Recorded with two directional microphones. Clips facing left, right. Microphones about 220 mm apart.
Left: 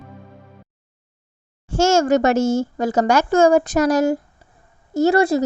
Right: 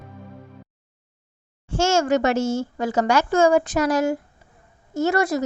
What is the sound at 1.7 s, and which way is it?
A woman's voice, 40° left (ahead or behind).